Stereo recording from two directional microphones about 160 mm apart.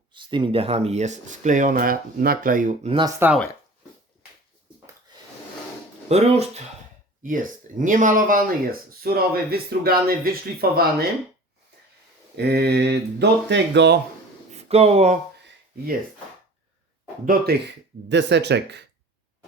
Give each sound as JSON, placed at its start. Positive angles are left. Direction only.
{"t": 0.1, "sound": "speech", "side_deg": -30}
{"t": 3.2, "sound": "speech", "side_deg": -15}
{"t": 6.1, "sound": "speech", "side_deg": -40}
{"t": 7.2, "sound": "speech", "side_deg": -55}
{"t": 12.4, "sound": "speech", "side_deg": -90}
{"t": 14.5, "sound": "speech", "side_deg": -40}
{"t": 17.2, "sound": "speech", "side_deg": -80}